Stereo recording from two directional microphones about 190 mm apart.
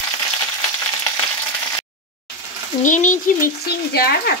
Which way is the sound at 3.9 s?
55° left (ahead or behind).